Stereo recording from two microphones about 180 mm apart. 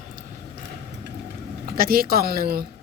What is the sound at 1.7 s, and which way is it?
Speech, 55° right (ahead or behind).